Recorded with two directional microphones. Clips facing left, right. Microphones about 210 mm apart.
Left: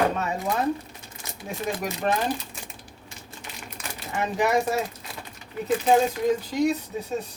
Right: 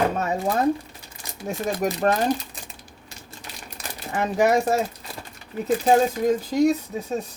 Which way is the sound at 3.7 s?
45° right (ahead or behind).